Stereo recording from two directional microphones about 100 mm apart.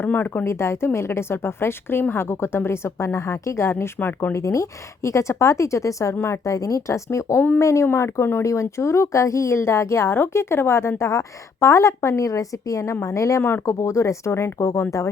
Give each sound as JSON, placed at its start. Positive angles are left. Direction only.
{"t": 0.0, "sound": "a woman's voice", "side_deg": 20}